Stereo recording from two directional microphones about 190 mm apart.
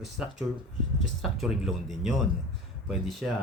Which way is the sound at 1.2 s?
Centre (ahead or behind).